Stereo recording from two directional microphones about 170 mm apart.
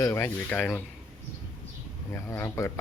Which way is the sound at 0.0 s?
15° left (ahead or behind).